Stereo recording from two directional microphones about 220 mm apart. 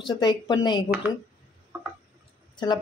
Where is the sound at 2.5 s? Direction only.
20° left (ahead or behind).